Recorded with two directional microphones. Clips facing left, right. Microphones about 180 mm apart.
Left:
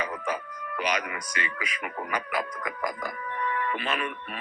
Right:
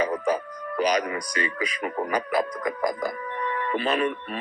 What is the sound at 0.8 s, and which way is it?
Speech, 35° right (ahead or behind).